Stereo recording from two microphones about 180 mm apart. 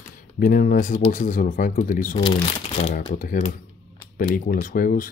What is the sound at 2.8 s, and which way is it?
Speech, 35° left (ahead or behind).